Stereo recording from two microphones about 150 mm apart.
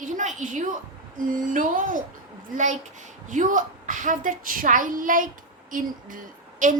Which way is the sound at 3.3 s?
60° right (ahead or behind).